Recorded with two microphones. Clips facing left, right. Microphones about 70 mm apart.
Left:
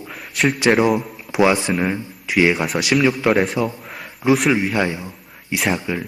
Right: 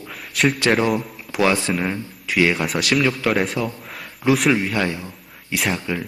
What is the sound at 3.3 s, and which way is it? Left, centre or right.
A man's voice, centre.